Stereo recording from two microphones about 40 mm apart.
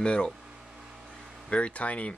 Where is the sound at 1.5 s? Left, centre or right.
Left.